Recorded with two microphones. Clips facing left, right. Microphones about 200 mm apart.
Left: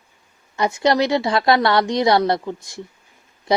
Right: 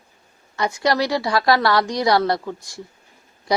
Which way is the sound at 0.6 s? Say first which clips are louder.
Left 3 dB; 20° left (ahead or behind).